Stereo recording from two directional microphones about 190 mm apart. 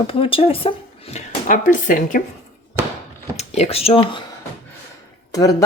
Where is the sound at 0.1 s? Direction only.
30° left (ahead or behind).